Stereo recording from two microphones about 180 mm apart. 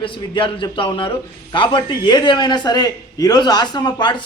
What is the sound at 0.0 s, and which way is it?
A man's voice, 30° left (ahead or behind).